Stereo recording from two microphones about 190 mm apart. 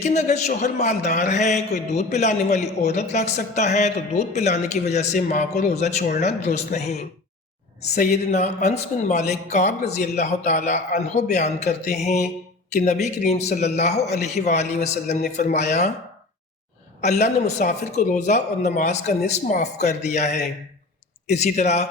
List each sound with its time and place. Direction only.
0.0 s a man's voice: 35° left (ahead or behind)
17.0 s a man's voice: 35° left (ahead or behind)